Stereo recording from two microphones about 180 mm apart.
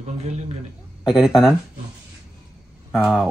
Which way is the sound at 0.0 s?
40° right (ahead or behind).